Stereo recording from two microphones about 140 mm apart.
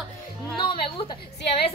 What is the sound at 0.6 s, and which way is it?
Speech, 35° left (ahead or behind).